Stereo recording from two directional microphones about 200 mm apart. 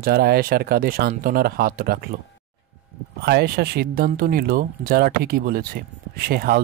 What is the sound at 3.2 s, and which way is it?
Speech, 55° right (ahead or behind).